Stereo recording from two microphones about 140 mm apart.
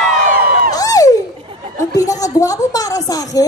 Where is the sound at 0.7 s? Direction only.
25° left (ahead or behind).